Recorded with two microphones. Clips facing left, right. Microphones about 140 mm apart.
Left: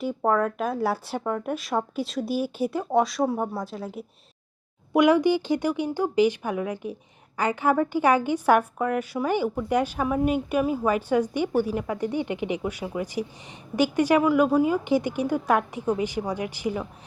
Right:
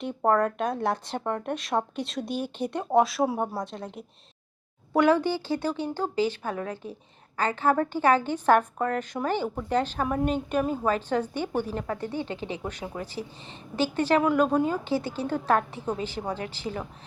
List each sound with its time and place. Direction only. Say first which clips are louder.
0.3 s a woman's voice: right 1 dB; centre (ahead or behind)